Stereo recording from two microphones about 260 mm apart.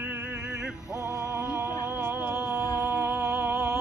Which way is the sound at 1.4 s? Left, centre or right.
Centre.